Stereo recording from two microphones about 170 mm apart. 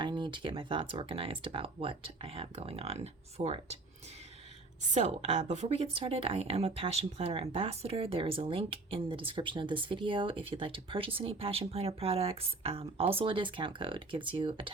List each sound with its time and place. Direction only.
0.0 s speech: 25° right (ahead or behind)
4.9 s speech: 40° right (ahead or behind)